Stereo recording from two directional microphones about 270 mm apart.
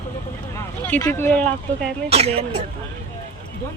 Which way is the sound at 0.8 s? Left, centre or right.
Centre.